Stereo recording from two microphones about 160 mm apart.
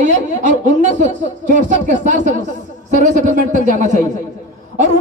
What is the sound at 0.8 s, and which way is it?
Speech, 50° right (ahead or behind).